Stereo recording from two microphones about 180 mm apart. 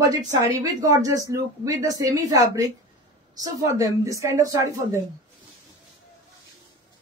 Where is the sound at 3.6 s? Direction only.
20° right (ahead or behind).